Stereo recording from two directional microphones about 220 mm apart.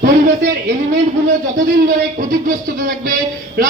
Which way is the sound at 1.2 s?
40° right (ahead or behind).